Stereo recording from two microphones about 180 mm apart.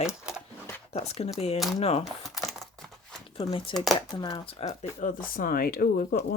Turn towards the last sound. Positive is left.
turn(degrees=55)  # may be behind; listen again after turning